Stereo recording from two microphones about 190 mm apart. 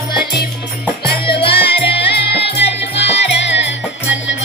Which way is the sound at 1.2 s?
25° left (ahead or behind).